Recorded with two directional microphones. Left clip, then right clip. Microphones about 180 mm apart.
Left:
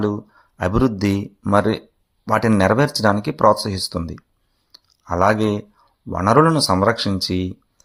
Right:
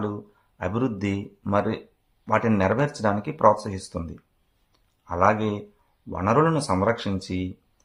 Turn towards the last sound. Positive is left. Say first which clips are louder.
# left 8 dB
turn(degrees=30)  # may be behind; listen again after turning